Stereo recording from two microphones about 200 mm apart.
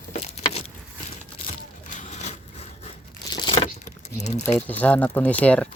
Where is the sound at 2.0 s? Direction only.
35° left (ahead or behind).